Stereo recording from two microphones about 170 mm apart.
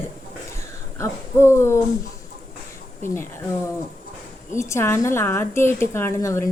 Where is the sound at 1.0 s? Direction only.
15° left (ahead or behind).